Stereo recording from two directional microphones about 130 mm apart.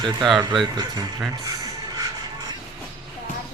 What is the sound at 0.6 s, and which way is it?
Speech, 35° right (ahead or behind).